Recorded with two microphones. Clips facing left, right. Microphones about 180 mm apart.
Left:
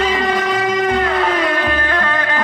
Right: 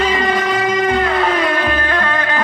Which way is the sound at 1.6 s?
15° right (ahead or behind).